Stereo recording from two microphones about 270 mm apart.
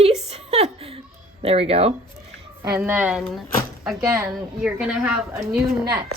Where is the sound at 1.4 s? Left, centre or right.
Right.